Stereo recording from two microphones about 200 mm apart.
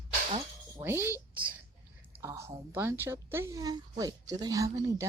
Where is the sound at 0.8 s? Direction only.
10° right (ahead or behind).